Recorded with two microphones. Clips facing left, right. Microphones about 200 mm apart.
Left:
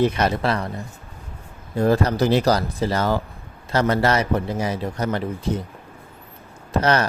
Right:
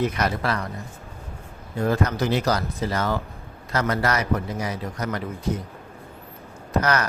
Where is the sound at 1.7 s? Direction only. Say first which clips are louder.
Left 4 dB; 35° left (ahead or behind).